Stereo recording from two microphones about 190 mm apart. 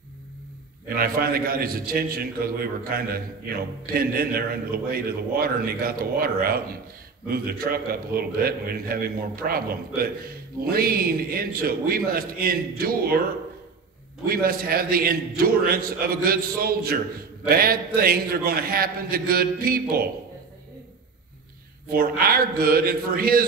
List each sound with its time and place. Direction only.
0.8 s a man's voice: 50° right (ahead or behind)
14.2 s a man's voice: 50° right (ahead or behind)
21.8 s a man's voice: 50° right (ahead or behind)